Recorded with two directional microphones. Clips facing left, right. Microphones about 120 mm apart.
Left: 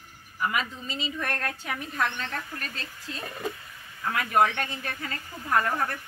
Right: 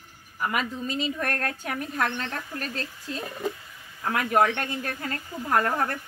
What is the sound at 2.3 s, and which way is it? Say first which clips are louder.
Speech: right 2 dB; 30° right (ahead or behind).